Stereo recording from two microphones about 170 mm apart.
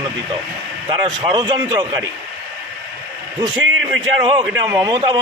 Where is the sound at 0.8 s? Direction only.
25° right (ahead or behind).